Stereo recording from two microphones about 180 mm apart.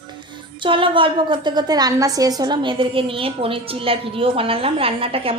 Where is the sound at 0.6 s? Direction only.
30° right (ahead or behind).